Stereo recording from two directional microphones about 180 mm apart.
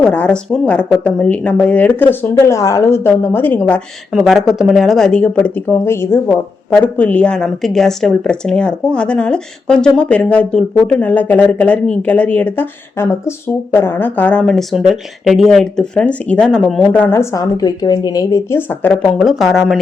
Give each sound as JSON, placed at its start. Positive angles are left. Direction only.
{"t": 0.0, "sound": "speech", "side_deg": 5}
{"t": 4.1, "sound": "speech", "side_deg": 0}
{"t": 19.2, "sound": "speech", "side_deg": 0}